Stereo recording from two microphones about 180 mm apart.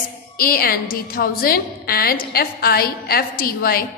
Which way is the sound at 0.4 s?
55° left (ahead or behind).